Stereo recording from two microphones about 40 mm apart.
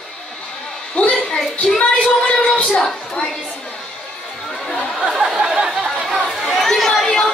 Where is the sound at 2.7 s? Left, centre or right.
Centre.